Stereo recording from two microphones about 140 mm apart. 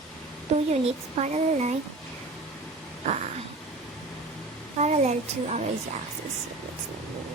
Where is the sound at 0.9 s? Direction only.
55° right (ahead or behind).